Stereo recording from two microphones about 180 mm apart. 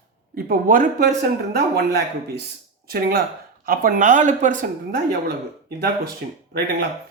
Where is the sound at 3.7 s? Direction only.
50° right (ahead or behind).